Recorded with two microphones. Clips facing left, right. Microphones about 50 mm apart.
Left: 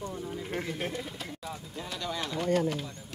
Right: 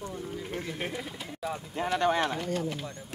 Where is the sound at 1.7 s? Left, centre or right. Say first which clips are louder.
Right 11 dB; right.